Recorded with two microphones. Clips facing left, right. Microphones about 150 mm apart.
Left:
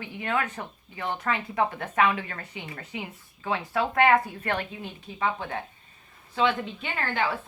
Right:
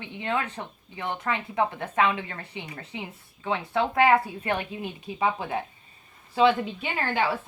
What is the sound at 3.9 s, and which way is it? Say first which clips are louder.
A woman's voice: even; 5° right (ahead or behind).